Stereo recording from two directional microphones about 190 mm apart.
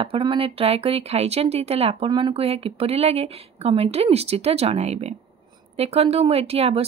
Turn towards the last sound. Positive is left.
turn(degrees=-30)  # may be behind; listen again after turning